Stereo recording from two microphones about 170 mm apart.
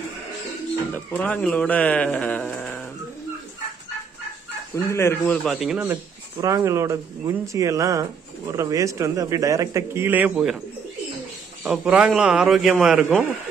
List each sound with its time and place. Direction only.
0.9 s speech: 10° left (ahead or behind)
4.7 s speech: 15° left (ahead or behind)
5.4 s a man's voice: centre (ahead or behind)
6.3 s speech: 20° right (ahead or behind)
11.6 s a man's voice: 5° right (ahead or behind)